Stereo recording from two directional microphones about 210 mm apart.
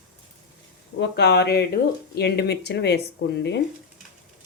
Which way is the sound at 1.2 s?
50° left (ahead or behind).